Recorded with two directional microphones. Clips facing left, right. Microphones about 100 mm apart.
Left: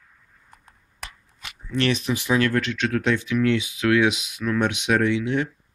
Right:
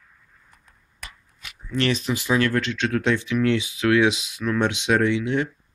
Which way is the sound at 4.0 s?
25° right (ahead or behind).